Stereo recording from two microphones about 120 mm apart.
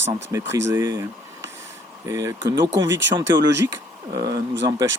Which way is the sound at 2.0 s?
25° right (ahead or behind).